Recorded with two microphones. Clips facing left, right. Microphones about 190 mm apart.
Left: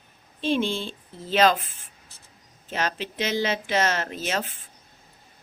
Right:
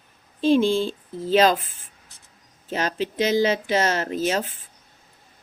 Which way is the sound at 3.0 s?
40° right (ahead or behind).